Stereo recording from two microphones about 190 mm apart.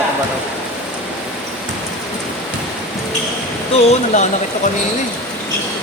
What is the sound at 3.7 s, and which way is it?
Speech, 40° left (ahead or behind).